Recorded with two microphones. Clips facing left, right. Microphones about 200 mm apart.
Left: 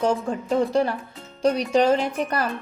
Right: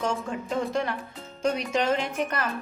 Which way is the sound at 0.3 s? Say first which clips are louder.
Left 6 dB; 35° left (ahead or behind).